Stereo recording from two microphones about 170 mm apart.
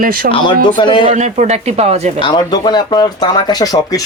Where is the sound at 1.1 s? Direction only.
45° right (ahead or behind).